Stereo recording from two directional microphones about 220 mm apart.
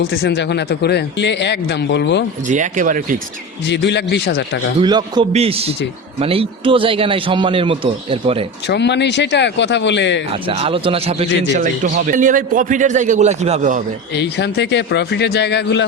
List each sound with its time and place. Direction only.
0.1 s a man's voice: 50° left (ahead or behind)
2.5 s a man's voice: 35° right (ahead or behind)
3.7 s a man's voice: 50° left (ahead or behind)
4.8 s a man's voice: 20° right (ahead or behind)
8.6 s a man's voice: 50° left (ahead or behind)
10.5 s a man's voice: 25° right (ahead or behind)
14.2 s a man's voice: 50° left (ahead or behind)